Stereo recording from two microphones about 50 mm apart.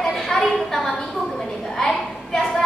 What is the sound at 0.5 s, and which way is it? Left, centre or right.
Speech, centre.